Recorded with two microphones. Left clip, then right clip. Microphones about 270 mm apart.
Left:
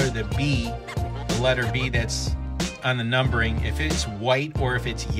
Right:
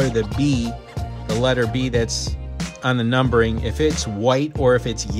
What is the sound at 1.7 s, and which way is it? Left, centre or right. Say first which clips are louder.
Speech: right 5 dB; centre.